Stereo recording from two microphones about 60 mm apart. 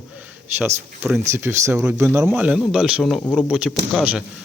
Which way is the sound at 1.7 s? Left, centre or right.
Right.